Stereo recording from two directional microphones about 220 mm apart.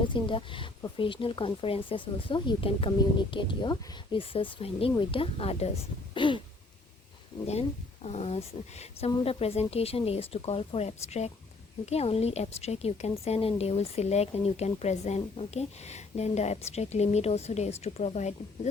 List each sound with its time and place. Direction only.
0.1 s a woman's voice: 20° left (ahead or behind)
8.0 s a woman's voice: 30° left (ahead or behind)